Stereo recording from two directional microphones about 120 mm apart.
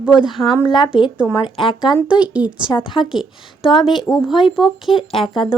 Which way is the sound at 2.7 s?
45° left (ahead or behind).